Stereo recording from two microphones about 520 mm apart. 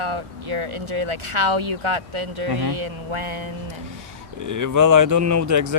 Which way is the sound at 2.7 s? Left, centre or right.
Right.